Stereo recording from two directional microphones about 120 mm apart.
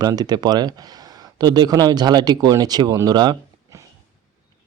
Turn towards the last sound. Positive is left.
turn(degrees=-30)  # may be behind; listen again after turning